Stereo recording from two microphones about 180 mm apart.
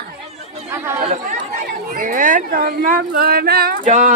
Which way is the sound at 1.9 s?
45° right (ahead or behind).